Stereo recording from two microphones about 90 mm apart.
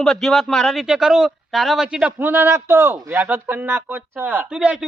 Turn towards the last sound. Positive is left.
turn(degrees=-10)  # may be behind; listen again after turning